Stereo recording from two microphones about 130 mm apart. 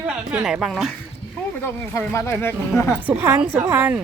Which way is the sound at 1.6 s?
20° left (ahead or behind).